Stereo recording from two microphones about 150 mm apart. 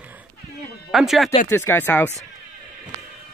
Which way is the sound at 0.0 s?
10° right (ahead or behind).